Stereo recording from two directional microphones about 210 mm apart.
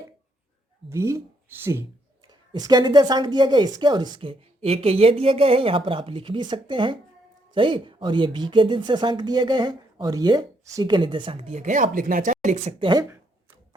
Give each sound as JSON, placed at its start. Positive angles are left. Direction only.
{"t": 0.9, "sound": "speech", "side_deg": -15}